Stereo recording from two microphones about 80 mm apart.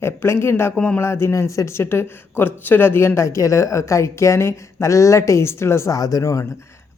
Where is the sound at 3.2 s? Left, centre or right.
Left.